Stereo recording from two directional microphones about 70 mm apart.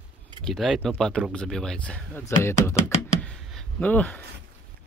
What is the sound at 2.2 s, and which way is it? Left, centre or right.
Speech, left.